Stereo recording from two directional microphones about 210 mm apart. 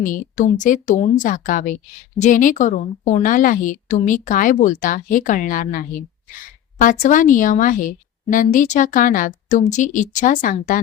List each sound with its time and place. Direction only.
0.0 s a woman's voice: 40° left (ahead or behind)